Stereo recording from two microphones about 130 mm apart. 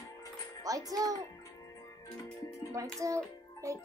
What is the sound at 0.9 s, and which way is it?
Speech, 25° right (ahead or behind).